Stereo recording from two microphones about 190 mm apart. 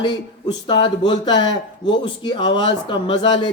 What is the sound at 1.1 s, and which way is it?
Speech, 20° left (ahead or behind).